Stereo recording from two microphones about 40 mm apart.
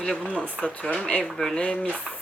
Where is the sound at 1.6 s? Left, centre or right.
Left.